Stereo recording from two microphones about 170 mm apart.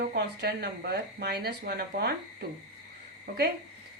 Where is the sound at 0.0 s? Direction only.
70° right (ahead or behind).